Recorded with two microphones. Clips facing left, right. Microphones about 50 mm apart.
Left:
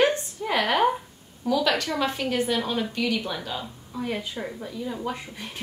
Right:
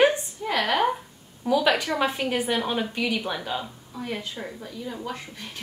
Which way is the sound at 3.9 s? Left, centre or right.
Centre.